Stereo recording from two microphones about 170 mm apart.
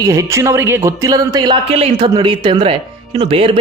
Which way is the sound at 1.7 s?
35° right (ahead or behind).